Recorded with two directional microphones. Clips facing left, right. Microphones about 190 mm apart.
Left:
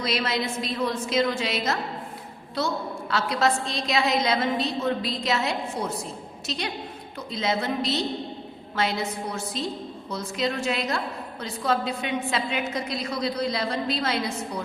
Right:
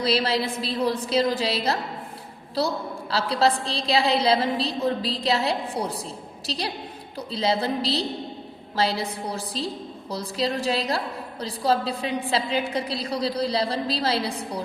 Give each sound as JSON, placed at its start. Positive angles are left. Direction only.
{"t": 0.0, "sound": "a woman's voice", "side_deg": -35}